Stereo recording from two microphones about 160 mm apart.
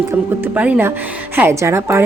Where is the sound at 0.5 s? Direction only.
10° right (ahead or behind).